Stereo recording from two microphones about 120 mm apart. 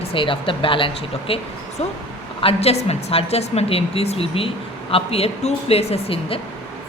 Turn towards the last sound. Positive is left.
turn(degrees=55)  # may be behind; listen again after turning